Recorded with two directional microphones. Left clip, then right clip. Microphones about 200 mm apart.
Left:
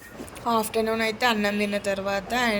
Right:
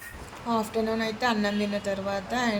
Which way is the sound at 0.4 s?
45° left (ahead or behind).